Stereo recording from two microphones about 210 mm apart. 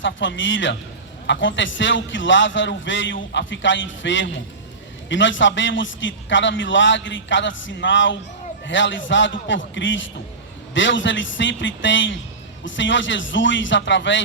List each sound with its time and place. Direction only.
0.0 s a man's voice: 60° left (ahead or behind)